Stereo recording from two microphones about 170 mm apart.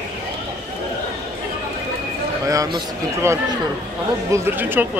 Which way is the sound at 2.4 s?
20° right (ahead or behind).